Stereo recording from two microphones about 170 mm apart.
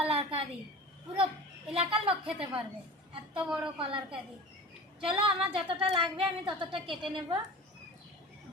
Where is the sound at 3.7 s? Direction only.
30° right (ahead or behind).